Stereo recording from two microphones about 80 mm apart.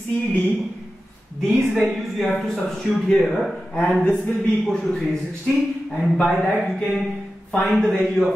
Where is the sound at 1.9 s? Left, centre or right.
Centre.